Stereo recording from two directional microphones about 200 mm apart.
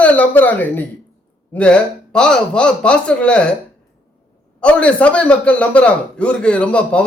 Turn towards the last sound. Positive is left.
turn(degrees=5)  # may be behind; listen again after turning